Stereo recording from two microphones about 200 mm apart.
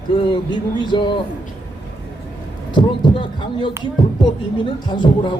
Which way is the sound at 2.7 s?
25° left (ahead or behind).